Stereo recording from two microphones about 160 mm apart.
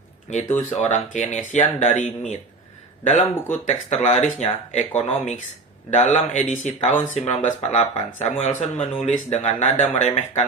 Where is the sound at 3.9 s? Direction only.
45° left (ahead or behind).